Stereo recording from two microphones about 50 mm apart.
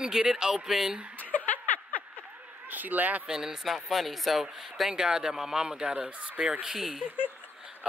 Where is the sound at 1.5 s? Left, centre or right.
Left.